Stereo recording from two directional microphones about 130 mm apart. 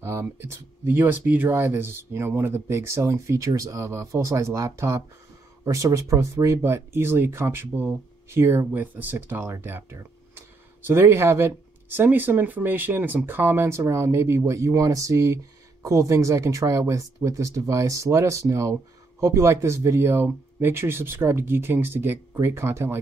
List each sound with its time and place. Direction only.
0.0 s speech: 20° right (ahead or behind)